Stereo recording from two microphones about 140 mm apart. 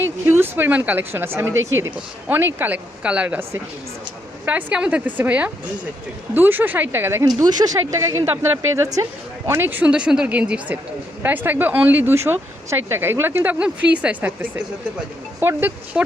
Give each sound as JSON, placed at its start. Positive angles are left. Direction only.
{"t": 0.0, "sound": "a woman's voice", "side_deg": -15}
{"t": 7.3, "sound": "a woman's voice", "side_deg": -30}